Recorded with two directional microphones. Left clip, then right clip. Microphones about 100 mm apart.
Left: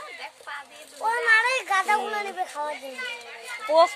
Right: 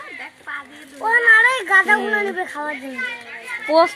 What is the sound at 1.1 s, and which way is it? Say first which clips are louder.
Speech: right 8 dB; 50° right (ahead or behind).